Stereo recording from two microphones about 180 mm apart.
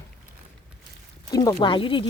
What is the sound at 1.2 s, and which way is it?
Speech, 20° left (ahead or behind).